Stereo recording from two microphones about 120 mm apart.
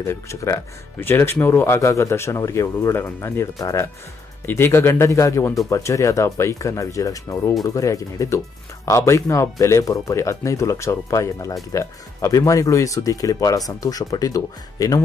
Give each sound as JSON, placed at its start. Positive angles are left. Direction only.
{"t": 0.0, "sound": "speech", "side_deg": 25}